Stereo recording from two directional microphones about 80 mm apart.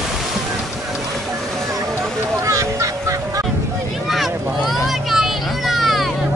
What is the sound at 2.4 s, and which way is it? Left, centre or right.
Vehicle, right.